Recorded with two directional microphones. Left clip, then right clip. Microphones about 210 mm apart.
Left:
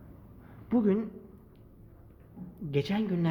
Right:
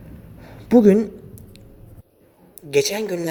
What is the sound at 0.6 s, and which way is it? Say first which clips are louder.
Speech: right 15 dB; 35° right (ahead or behind).